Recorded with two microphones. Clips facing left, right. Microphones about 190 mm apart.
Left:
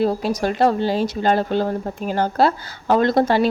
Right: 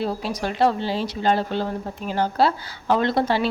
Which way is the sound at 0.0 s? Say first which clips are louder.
Left 6 dB; 45° left (ahead or behind).